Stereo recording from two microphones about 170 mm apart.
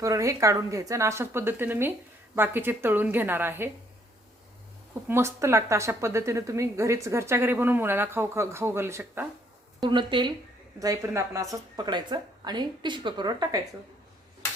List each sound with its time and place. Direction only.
0.0 s a woman's voice: 20° right (ahead or behind)
5.0 s a woman's voice: 15° right (ahead or behind)
9.8 s a woman's voice: 25° right (ahead or behind)